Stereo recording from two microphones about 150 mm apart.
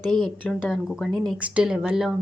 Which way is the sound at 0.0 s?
30° right (ahead or behind).